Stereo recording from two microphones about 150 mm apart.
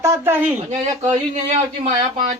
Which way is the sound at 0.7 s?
50° right (ahead or behind).